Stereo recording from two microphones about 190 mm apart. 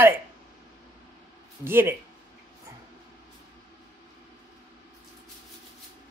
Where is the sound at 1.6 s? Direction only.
10° right (ahead or behind).